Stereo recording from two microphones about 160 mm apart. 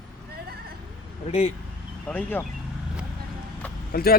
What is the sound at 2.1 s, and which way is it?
Speech, 10° left (ahead or behind).